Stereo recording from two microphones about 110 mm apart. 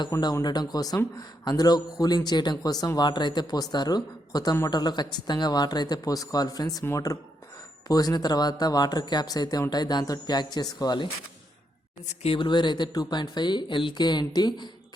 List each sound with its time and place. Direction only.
0.1 s speech: 30° left (ahead or behind)
0.4 s speech: 40° left (ahead or behind)
12.0 s speech: 70° left (ahead or behind)
12.4 s speech: 45° left (ahead or behind)